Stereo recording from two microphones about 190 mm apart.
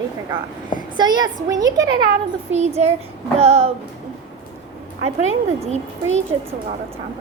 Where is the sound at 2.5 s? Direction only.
35° right (ahead or behind).